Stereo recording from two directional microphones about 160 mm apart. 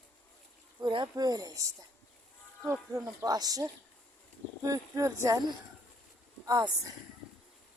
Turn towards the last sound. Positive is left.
turn(degrees=-25)  # may be behind; listen again after turning